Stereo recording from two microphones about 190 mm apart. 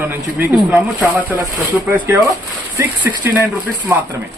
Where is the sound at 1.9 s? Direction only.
15° right (ahead or behind).